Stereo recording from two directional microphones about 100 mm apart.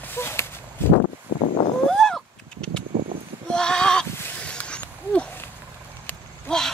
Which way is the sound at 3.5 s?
5° left (ahead or behind).